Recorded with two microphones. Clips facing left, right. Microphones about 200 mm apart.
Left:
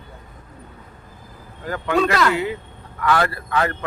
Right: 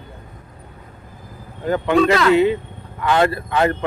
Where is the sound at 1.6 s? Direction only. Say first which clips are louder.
Right 5 dB; 20° right (ahead or behind).